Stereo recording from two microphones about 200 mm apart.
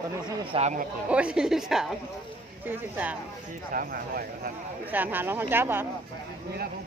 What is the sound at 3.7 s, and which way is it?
Speech, 45° right (ahead or behind).